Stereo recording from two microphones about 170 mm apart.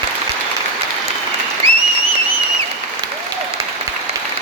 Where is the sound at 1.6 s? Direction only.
30° right (ahead or behind).